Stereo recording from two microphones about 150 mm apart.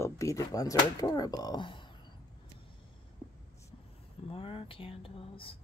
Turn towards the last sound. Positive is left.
turn(degrees=40)  # may be behind; listen again after turning